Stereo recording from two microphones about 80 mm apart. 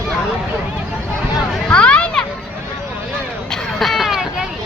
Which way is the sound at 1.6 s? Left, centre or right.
Centre.